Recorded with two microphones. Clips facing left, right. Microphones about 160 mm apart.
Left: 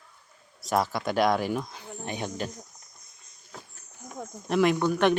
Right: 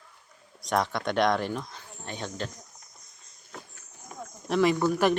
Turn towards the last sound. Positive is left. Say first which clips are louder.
# even
turn(degrees=-5)  # may be behind; listen again after turning